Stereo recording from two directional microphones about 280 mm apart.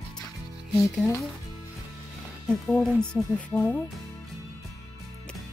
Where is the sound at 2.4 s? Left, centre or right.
Centre.